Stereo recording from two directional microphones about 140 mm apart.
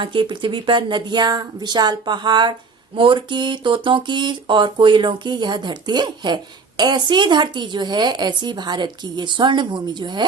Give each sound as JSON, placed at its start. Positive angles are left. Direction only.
{"t": 0.0, "sound": "speech", "side_deg": -35}